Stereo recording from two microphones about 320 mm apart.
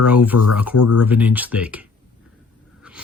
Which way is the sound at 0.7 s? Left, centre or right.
Left.